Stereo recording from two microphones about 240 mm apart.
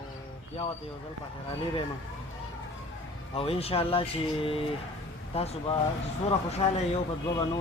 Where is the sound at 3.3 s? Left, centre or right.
Left.